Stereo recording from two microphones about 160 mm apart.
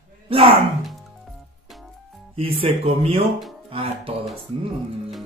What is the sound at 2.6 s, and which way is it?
Speech, 35° right (ahead or behind).